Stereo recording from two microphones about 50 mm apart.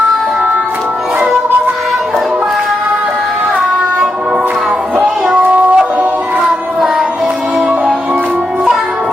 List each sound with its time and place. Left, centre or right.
5.3 s music: right